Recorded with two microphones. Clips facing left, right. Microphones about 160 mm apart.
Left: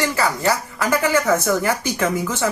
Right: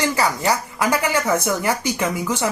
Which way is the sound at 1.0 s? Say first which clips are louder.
Left 2 dB; 15° right (ahead or behind).